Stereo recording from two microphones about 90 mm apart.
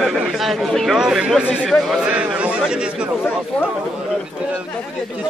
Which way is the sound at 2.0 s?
10° right (ahead or behind).